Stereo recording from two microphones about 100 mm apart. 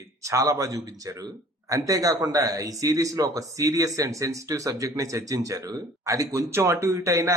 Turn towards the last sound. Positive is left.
turn(degrees=-30)  # may be behind; listen again after turning